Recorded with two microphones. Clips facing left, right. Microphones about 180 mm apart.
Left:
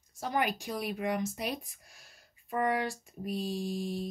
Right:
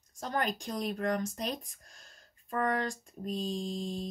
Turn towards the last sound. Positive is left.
turn(degrees=10)  # may be behind; listen again after turning